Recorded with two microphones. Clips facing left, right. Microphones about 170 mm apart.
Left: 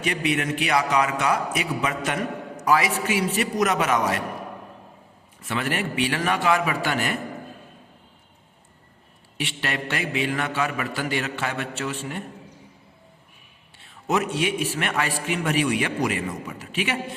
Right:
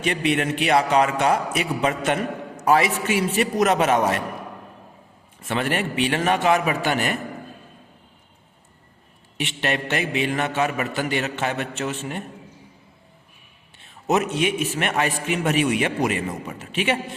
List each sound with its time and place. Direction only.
0.0 s a man's voice: 30° right (ahead or behind)
5.5 s a man's voice: 30° right (ahead or behind)
9.4 s a man's voice: 20° right (ahead or behind)
13.7 s a man's voice: 20° right (ahead or behind)